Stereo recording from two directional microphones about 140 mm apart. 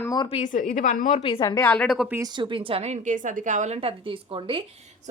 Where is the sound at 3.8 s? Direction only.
40° right (ahead or behind).